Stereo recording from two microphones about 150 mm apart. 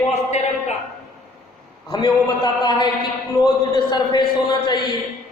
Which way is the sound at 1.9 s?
25° left (ahead or behind).